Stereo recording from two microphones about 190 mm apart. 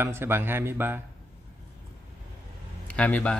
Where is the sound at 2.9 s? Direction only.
5° left (ahead or behind).